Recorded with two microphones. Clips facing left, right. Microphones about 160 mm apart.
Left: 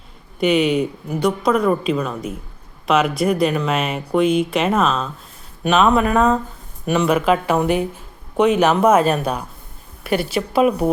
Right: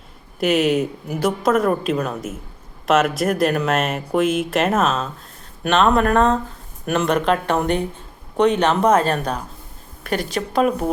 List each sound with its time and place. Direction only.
0.3 s speech: 5° right (ahead or behind)